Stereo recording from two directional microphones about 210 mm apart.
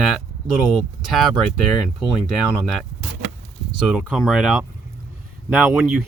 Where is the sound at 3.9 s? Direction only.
Centre (ahead or behind).